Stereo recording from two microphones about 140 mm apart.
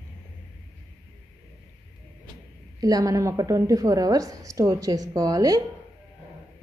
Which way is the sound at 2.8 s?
25° right (ahead or behind).